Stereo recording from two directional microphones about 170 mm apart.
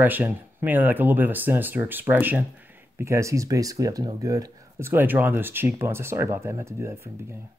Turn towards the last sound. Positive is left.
turn(degrees=-15)  # may be behind; listen again after turning